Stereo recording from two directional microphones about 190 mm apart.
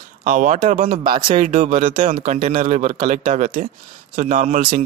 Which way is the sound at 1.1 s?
25° right (ahead or behind).